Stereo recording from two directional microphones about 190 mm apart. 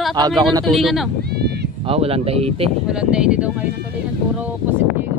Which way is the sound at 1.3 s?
60° right (ahead or behind).